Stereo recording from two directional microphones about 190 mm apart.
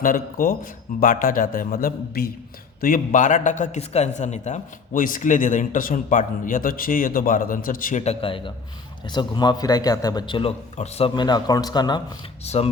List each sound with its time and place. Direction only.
0.0 s a man's voice: 50° left (ahead or behind); by 12.0 s 20° left (ahead or behind)
12.5 s speech: 35° left (ahead or behind)